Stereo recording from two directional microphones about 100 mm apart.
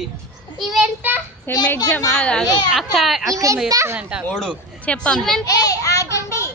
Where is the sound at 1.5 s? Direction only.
20° left (ahead or behind).